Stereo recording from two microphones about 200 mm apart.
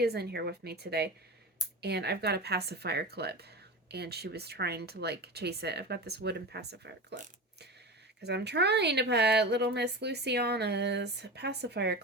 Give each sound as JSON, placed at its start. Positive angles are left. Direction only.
{"t": 0.0, "sound": "speech", "side_deg": -55}
{"t": 8.2, "sound": "speech", "side_deg": -55}